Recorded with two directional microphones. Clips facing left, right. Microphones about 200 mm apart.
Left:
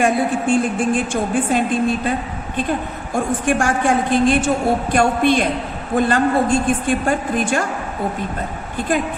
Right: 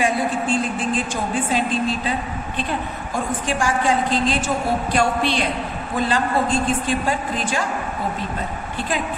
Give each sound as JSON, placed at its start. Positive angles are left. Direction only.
{"t": 0.0, "sound": "a woman's voice", "side_deg": 50}
{"t": 3.4, "sound": "a woman's voice", "side_deg": 55}